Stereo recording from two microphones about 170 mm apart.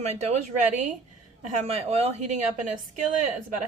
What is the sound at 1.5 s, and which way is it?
A woman's voice, 40° right (ahead or behind).